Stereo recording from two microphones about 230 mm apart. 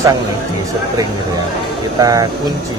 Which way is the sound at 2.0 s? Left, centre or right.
Centre.